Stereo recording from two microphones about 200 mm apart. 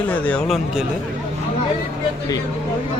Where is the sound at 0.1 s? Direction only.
5° left (ahead or behind).